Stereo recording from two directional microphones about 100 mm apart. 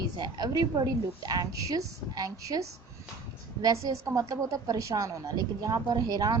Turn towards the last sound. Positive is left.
turn(degrees=-40)  # may be behind; listen again after turning